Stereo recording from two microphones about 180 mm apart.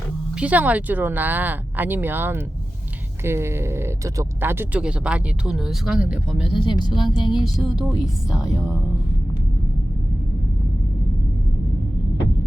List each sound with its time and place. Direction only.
0.3 s speech: 10° right (ahead or behind)
6.4 s speech: 25° left (ahead or behind)
7.4 s speech: centre (ahead or behind)